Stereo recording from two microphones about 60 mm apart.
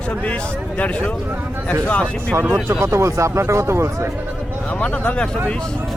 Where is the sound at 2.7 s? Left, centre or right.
Right.